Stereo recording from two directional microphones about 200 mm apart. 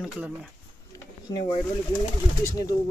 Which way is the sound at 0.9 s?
20° left (ahead or behind).